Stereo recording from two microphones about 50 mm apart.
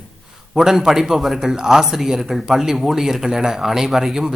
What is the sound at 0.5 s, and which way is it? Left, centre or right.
A man's voice, centre.